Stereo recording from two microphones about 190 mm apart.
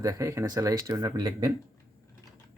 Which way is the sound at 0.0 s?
15° right (ahead or behind).